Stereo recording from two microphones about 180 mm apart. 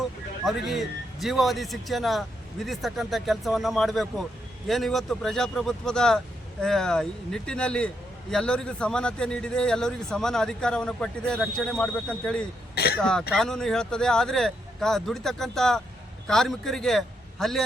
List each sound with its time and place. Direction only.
0.4 s a man's voice: centre (ahead or behind)
12.7 s speech: 60° left (ahead or behind)
13.0 s a man's voice: 5° left (ahead or behind)